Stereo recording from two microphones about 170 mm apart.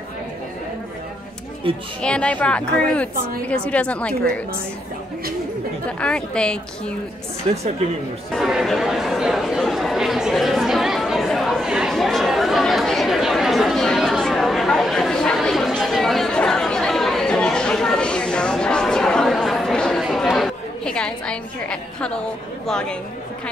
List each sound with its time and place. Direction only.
2.0 s a woman's voice: 5° left (ahead or behind)
5.9 s a woman's voice: 5° left (ahead or behind)
7.5 s a woman's voice: 35° right (ahead or behind)
8.3 s chatter: centre (ahead or behind)
22.7 s a woman's voice: 5° left (ahead or behind)